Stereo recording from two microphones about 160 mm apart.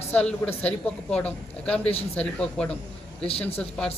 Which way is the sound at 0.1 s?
5° left (ahead or behind).